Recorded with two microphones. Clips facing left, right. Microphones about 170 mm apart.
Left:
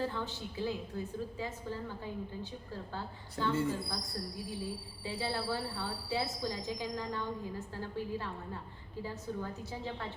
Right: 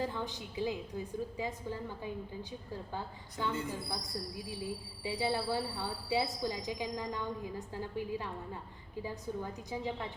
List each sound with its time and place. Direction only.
0.0 s a woman's voice: 15° right (ahead or behind)
2.9 s a woman's voice: 15° right (ahead or behind)
5.0 s a woman's voice: 15° right (ahead or behind)